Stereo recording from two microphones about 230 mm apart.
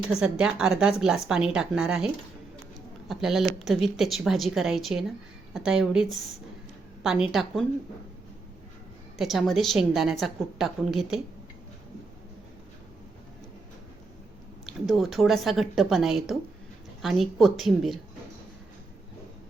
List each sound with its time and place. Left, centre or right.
0.1 s a woman's voice: centre
3.1 s a woman's voice: centre
9.1 s a woman's voice: centre
14.7 s a woman's voice: centre